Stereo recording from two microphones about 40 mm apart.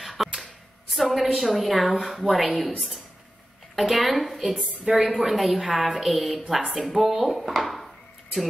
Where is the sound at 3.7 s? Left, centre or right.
Centre.